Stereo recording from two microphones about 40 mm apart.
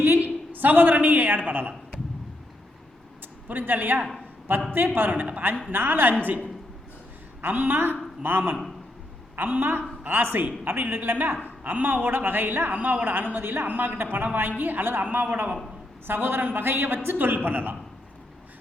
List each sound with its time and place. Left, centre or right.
0.2 s a man's voice: right
3.5 s a man's voice: right
7.4 s a man's voice: right
10.7 s a woman's voice: right
13.4 s a woman's voice: right
16.0 s a woman's voice: right